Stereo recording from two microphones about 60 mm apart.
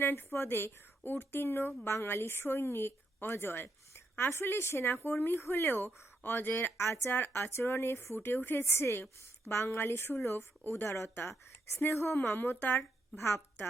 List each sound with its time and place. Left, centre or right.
0.0 s a woman's voice: left
9.8 s speech: left
11.1 s a woman's voice: left